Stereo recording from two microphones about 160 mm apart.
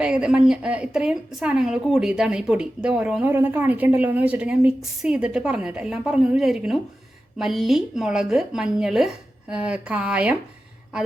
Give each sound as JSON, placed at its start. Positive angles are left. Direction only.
{"t": 0.0, "sound": "a woman's voice", "side_deg": -5}